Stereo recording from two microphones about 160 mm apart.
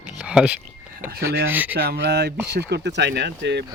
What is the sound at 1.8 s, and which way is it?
Speech, 85° right.